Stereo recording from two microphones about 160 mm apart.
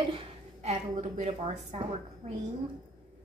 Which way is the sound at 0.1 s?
40° right (ahead or behind).